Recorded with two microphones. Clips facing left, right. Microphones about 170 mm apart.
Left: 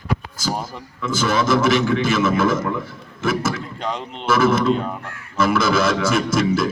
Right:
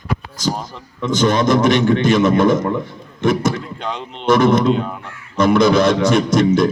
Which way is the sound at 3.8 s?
Centre (ahead or behind).